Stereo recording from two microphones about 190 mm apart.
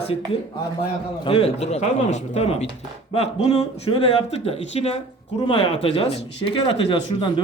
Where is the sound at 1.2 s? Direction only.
30° left (ahead or behind).